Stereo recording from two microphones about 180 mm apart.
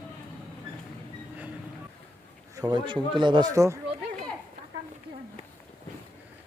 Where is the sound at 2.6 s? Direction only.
25° right (ahead or behind).